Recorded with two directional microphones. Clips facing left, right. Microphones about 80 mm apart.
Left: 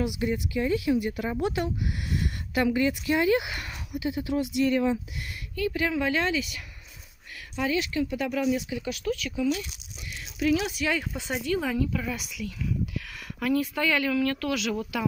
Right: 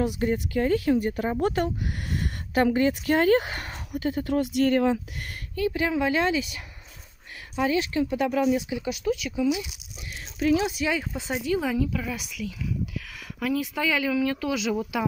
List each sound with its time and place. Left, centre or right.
0.0 s speech: right
5.6 s a woman's voice: right
7.6 s a woman's voice: right
8.5 s speech: centre
10.4 s a woman's voice: right
11.0 s speech: centre